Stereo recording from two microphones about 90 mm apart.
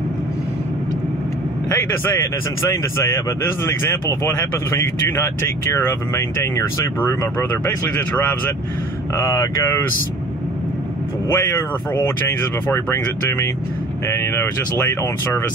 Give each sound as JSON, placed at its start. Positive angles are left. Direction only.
{"t": 2.7, "sound": "speech", "side_deg": 30}
{"t": 4.3, "sound": "speech", "side_deg": 30}
{"t": 9.1, "sound": "speech", "side_deg": 35}
{"t": 11.2, "sound": "speech", "side_deg": 25}